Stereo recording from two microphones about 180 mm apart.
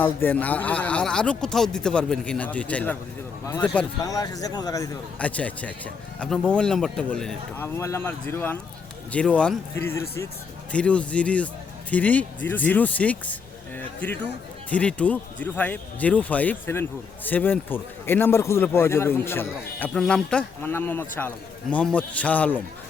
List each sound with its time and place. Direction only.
0.0 s a man's voice: 10° left (ahead or behind)
4.0 s speech: 20° left (ahead or behind)
5.2 s a man's voice: 10° left (ahead or behind)